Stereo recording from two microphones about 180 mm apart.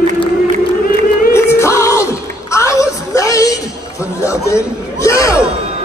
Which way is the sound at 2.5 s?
15° left (ahead or behind).